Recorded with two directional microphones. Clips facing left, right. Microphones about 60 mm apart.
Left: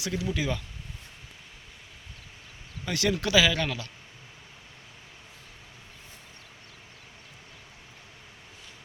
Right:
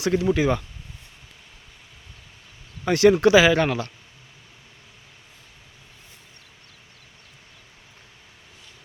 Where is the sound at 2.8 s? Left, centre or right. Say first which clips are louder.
Right 12 dB; right.